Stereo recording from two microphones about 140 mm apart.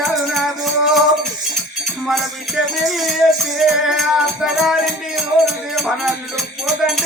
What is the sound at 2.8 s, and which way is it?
Music, centre (ahead or behind).